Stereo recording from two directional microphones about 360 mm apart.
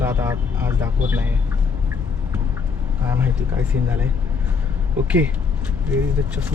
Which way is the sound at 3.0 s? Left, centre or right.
Centre.